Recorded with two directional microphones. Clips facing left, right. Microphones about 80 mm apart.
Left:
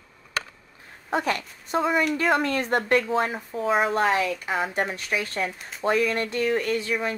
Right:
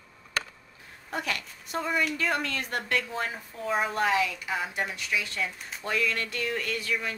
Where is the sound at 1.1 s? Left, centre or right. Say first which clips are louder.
Left 7 dB; left.